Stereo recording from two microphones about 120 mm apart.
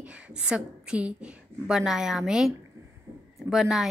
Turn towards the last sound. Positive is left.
turn(degrees=-5)  # may be behind; listen again after turning